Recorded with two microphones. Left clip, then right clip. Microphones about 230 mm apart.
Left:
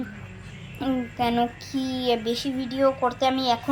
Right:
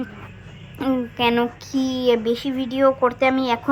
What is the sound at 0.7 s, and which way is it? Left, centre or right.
A woman's voice, centre.